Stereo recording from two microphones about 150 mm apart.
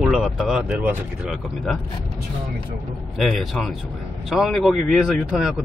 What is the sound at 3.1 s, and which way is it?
Speech, centre (ahead or behind).